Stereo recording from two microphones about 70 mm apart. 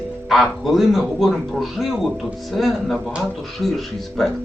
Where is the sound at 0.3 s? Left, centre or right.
Centre.